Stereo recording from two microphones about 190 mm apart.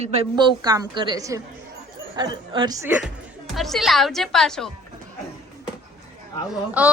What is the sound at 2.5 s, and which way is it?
Speech, 25° right (ahead or behind).